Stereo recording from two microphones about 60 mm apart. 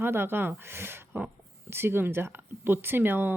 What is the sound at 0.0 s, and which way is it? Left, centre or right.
Speech, right.